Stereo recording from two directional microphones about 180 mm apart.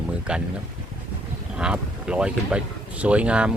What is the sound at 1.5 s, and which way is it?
Speech, 5° right (ahead or behind).